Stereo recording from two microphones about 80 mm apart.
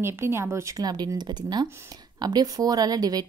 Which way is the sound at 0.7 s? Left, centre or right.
Right.